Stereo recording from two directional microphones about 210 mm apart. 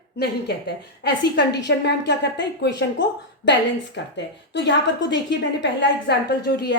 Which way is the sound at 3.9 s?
55° left (ahead or behind).